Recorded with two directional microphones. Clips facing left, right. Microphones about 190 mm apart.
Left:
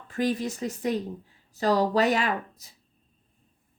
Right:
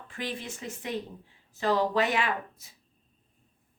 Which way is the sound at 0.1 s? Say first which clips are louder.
Left 10 dB; 40° left (ahead or behind).